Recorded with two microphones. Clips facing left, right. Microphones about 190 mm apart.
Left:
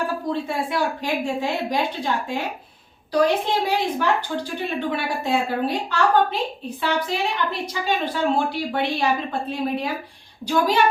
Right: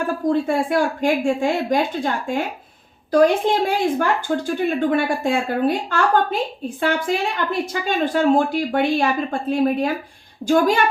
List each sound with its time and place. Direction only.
0.3 s a woman's voice: 50° right (ahead or behind)